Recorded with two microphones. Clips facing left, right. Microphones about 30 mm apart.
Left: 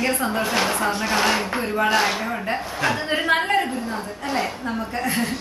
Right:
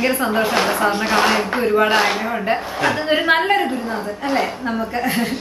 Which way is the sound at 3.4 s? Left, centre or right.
Centre.